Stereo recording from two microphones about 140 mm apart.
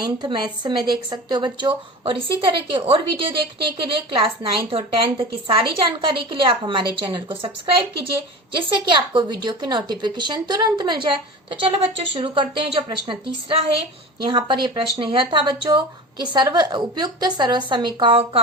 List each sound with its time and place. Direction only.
0.0 s a woman's voice: 30° right (ahead or behind)
8.5 s a woman's voice: 35° right (ahead or behind)